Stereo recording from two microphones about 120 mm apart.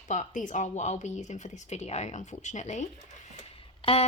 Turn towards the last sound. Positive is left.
turn(degrees=50)  # may be behind; listen again after turning